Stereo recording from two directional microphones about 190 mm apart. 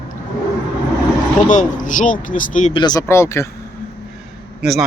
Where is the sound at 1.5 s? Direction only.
40° left (ahead or behind).